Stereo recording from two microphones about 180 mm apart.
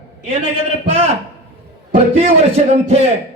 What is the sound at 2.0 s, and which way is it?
A man's voice, 35° right (ahead or behind).